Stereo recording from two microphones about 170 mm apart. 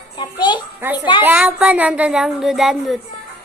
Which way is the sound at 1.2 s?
10° right (ahead or behind).